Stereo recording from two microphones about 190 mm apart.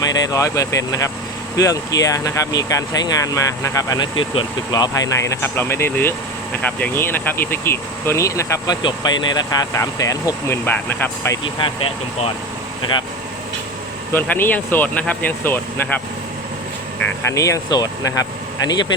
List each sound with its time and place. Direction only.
0.0 s speech: 20° left (ahead or behind)
11.4 s speech: 30° left (ahead or behind)
14.1 s speech: 10° left (ahead or behind)
17.2 s speech: 15° left (ahead or behind)